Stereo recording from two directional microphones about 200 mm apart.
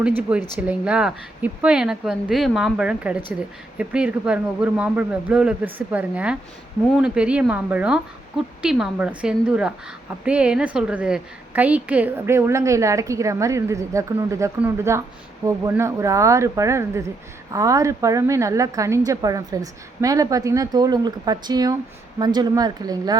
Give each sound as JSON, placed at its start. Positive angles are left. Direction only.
{"t": 0.2, "sound": "a woman's voice", "side_deg": -5}